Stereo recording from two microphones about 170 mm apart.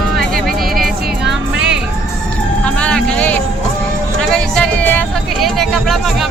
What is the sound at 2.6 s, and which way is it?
Music, 5° left (ahead or behind).